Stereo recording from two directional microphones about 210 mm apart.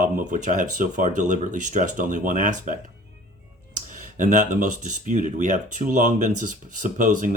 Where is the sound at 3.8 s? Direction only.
40° right (ahead or behind).